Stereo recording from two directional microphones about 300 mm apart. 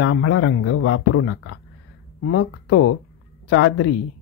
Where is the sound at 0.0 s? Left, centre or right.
Left.